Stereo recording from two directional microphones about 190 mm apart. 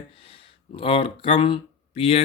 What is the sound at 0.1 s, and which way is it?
Speech, 30° left (ahead or behind).